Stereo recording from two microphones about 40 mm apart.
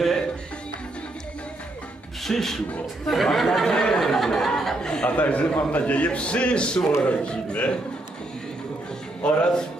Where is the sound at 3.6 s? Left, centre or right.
Centre.